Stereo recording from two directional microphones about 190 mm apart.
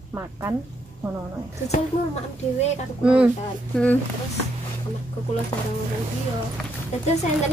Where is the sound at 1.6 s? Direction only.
35° left (ahead or behind).